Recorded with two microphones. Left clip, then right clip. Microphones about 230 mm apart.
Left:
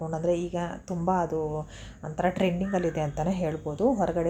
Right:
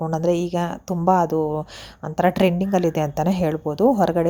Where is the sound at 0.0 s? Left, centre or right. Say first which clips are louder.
Right 6 dB; right.